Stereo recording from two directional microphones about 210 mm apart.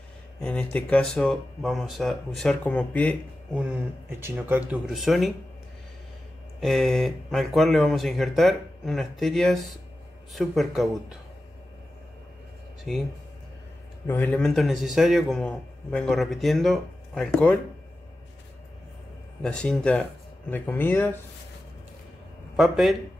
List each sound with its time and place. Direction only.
0.4 s a man's voice: 5° left (ahead or behind)
4.2 s a man's voice: 10° right (ahead or behind)
6.6 s a man's voice: centre (ahead or behind)
14.0 s a man's voice: 10° left (ahead or behind)
19.4 s speech: 5° left (ahead or behind)
22.6 s a man's voice: centre (ahead or behind)